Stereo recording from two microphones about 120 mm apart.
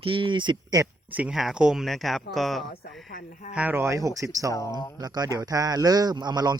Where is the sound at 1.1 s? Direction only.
5° right (ahead or behind).